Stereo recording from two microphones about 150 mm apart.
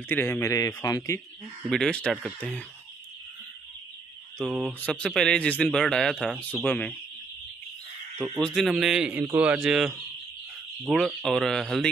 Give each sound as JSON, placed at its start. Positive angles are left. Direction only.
{"t": 0.1, "sound": "a man's voice", "side_deg": 15}
{"t": 1.7, "sound": "a man's voice", "side_deg": 5}
{"t": 4.4, "sound": "a man's voice", "side_deg": 0}
{"t": 8.2, "sound": "a man's voice", "side_deg": 5}